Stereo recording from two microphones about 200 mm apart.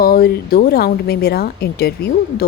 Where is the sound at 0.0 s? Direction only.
50° left (ahead or behind).